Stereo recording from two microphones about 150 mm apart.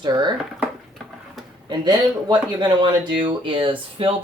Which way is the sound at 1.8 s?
30° right (ahead or behind).